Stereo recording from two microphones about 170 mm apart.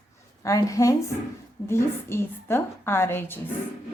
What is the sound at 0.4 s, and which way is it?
A woman's voice, 20° left (ahead or behind).